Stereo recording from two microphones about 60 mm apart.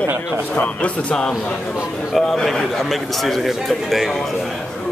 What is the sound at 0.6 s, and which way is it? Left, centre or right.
Speech, centre.